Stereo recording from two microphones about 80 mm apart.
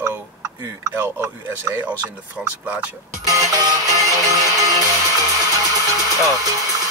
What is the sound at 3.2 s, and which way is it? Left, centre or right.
Music, right.